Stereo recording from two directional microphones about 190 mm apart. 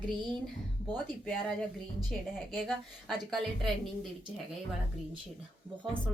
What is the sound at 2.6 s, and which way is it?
A woman's voice, centre (ahead or behind).